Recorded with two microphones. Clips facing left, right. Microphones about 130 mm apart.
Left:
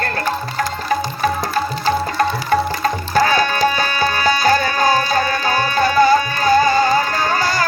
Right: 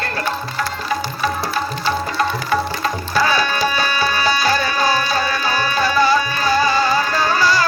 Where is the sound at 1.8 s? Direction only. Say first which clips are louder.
Left 3 dB; 45° left (ahead or behind).